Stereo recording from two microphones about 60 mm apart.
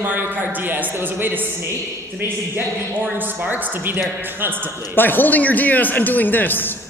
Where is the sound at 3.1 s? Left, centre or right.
Right.